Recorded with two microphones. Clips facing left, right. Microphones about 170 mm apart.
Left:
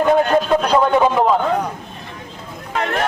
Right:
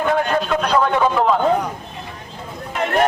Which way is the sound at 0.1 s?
35° left (ahead or behind).